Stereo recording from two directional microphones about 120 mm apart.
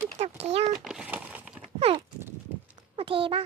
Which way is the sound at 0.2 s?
60° right (ahead or behind).